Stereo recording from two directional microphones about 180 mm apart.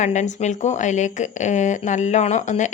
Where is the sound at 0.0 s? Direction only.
40° left (ahead or behind).